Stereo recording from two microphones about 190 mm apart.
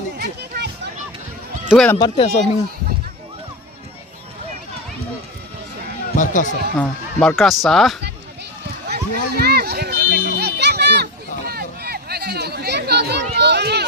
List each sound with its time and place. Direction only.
0.2 s a sound: 55° right (ahead or behind)
1.7 s speech: 5° left (ahead or behind)
2.0 s speech: 25° left (ahead or behind)
6.1 s speech: 40° left (ahead or behind)
6.7 s speech: 5° left (ahead or behind)
8.9 s music: 55° right (ahead or behind)
11.4 s chatter: 55° right (ahead or behind)